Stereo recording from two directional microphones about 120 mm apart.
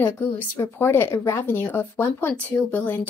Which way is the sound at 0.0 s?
20° left (ahead or behind).